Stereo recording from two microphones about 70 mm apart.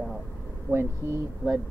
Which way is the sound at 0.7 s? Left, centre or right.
Right.